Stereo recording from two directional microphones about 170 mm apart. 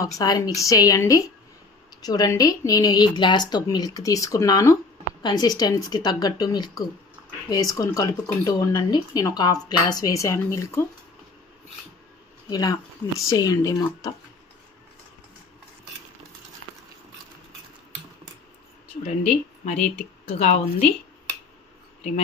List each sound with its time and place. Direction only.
0.0 s a woman's voice: 20° left (ahead or behind)
12.4 s speech: 20° left (ahead or behind)
19.0 s speech: 40° left (ahead or behind)